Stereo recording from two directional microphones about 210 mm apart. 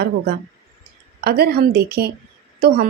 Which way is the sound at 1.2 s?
50° right (ahead or behind).